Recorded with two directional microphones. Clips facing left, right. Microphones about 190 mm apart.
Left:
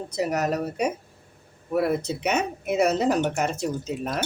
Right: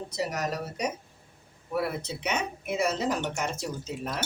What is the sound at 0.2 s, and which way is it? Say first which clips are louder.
Speech: left 6 dB; 55° left (ahead or behind).